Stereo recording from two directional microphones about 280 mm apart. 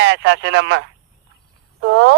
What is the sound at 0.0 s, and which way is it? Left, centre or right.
Speech, right.